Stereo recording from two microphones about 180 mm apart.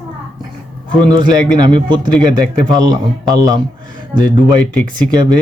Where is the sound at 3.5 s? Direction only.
25° right (ahead or behind).